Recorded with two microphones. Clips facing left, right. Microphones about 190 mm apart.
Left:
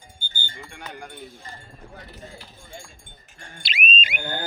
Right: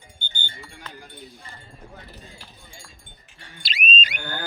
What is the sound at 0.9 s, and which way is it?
Speech, 50° left (ahead or behind).